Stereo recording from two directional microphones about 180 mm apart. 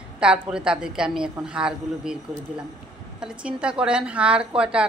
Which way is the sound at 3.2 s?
5° right (ahead or behind).